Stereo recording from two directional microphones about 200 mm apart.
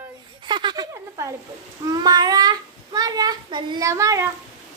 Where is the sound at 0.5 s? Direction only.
25° right (ahead or behind).